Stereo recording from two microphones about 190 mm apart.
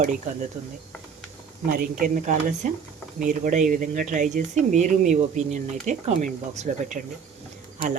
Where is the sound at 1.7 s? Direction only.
45° right (ahead or behind).